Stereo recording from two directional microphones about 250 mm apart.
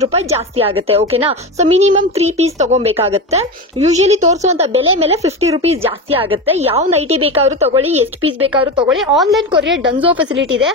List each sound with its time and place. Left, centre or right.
0.0 s speech: right
8.8 s a woman's voice: centre
10.3 s speech: right